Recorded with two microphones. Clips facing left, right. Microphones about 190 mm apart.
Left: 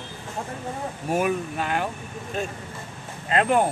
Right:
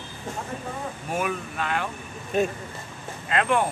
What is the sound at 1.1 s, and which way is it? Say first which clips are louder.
Speech: left 5 dB; 40° left (ahead or behind).